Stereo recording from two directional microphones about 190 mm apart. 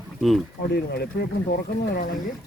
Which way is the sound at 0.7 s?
60° left (ahead or behind).